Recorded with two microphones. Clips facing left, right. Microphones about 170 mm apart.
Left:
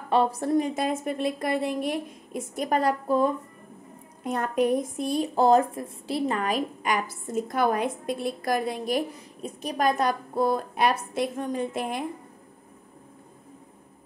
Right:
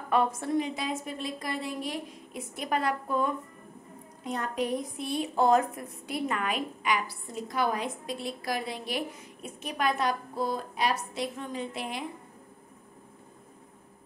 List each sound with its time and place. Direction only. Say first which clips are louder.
0.1 s a woman's voice: left 4 dB; 35° left (ahead or behind)
4.2 s a woman's voice: left 6 dB; 50° left (ahead or behind)